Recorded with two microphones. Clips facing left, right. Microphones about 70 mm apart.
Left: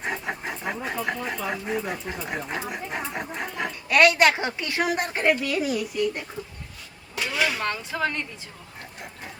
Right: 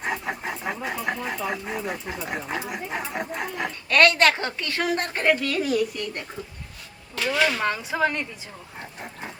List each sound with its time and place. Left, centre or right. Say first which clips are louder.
0.0 s a sound: right 1 dB; centre
3.8 s a woman's voice: even; centre
7.6 s a woman's voice: right 3 dB; centre